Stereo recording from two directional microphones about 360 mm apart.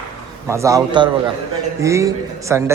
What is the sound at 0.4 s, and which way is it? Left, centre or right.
A man's voice, centre.